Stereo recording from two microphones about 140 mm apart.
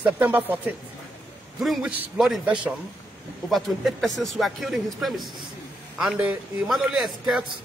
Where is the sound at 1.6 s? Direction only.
Centre (ahead or behind).